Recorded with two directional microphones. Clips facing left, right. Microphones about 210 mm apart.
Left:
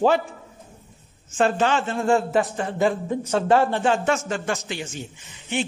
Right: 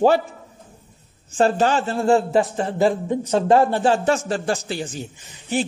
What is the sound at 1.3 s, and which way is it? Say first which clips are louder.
Speech: right 3 dB; 35° right (ahead or behind).